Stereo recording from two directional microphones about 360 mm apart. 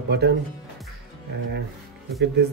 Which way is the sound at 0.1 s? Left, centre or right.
Right.